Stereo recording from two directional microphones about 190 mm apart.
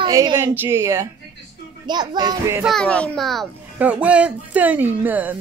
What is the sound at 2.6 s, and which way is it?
A child's voice, 5° left (ahead or behind).